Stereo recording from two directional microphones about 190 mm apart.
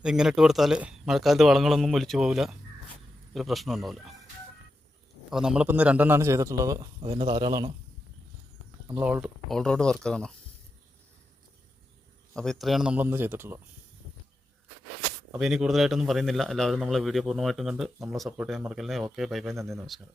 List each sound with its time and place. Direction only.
0.0 s a man's voice: 5° right (ahead or behind)
5.3 s a man's voice: 5° right (ahead or behind); by 7.7 s 20° right (ahead or behind)
9.0 s a man's voice: 5° right (ahead or behind)
12.3 s a man's voice: 5° left (ahead or behind)
15.3 s a man's voice: centre (ahead or behind)